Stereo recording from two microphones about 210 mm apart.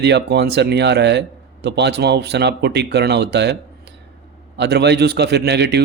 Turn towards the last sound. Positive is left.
turn(degrees=-50)  # may be behind; listen again after turning